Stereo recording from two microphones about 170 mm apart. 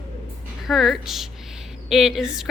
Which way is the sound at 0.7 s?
Centre (ahead or behind).